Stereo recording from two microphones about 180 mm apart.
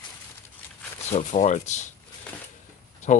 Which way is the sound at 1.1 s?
40° left (ahead or behind).